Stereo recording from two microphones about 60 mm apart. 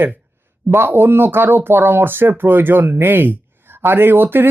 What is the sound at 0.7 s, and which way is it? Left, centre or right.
Speech, right.